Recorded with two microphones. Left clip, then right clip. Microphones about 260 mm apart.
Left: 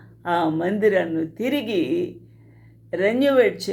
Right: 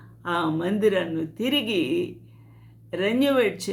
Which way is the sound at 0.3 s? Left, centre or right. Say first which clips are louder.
Left 4 dB; centre.